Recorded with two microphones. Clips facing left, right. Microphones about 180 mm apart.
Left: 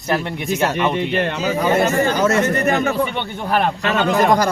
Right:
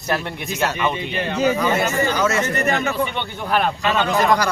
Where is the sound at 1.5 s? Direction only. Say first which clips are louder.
Left 3 dB; 50° left (ahead or behind).